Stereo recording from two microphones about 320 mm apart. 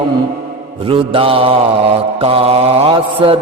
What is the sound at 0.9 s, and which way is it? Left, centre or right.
Mantra, centre.